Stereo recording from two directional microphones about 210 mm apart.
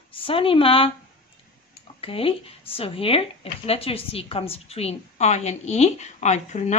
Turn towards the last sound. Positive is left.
turn(degrees=35)  # may be behind; listen again after turning